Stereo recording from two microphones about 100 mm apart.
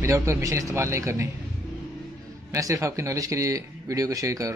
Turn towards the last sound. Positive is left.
turn(degrees=-35)  # may be behind; listen again after turning